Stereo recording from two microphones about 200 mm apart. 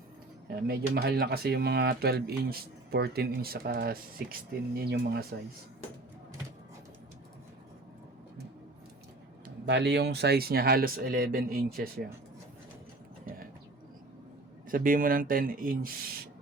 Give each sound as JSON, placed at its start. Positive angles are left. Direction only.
{"t": 0.4, "sound": "speech", "side_deg": -50}
{"t": 9.6, "sound": "speech", "side_deg": -60}
{"t": 14.7, "sound": "speech", "side_deg": -45}